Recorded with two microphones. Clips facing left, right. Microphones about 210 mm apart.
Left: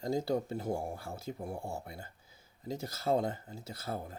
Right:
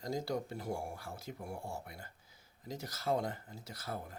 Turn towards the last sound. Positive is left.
turn(degrees=25)  # may be behind; listen again after turning